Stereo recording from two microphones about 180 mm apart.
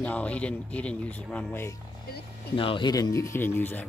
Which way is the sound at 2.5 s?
30° left (ahead or behind).